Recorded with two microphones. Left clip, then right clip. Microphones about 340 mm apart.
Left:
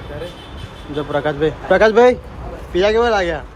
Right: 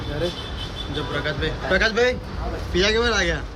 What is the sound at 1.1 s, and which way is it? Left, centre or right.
A man's voice, centre.